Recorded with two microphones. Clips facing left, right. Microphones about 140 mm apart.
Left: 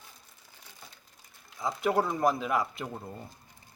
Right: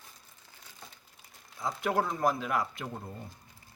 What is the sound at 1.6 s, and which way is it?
Speech, centre (ahead or behind).